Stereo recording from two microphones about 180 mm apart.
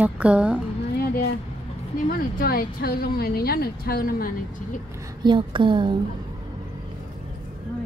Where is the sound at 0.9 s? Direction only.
60° left (ahead or behind).